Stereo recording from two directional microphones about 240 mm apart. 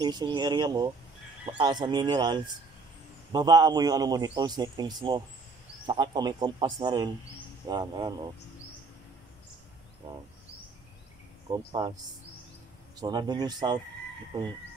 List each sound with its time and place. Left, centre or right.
0.0 s a man's voice: centre
11.5 s a man's voice: centre
13.0 s a man's voice: centre